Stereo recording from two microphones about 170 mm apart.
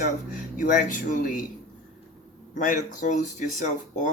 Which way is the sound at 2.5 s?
50° left (ahead or behind).